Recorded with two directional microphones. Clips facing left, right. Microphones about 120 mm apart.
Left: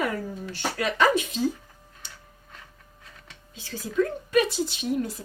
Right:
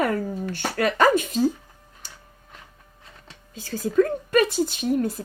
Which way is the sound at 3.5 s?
45° right (ahead or behind).